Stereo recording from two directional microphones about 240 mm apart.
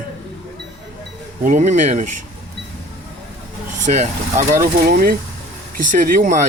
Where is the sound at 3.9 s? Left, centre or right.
Right.